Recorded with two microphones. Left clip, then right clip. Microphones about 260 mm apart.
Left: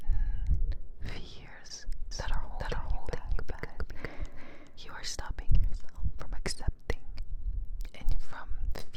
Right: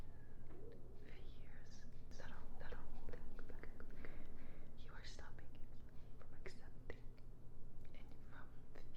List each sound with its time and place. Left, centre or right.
0.7 s whispering: left